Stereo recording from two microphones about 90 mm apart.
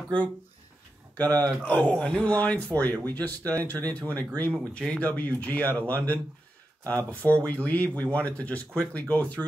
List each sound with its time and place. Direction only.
1.4 s speech: 20° left (ahead or behind)